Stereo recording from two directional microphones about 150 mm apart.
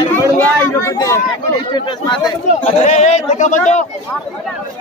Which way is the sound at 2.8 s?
50° left (ahead or behind).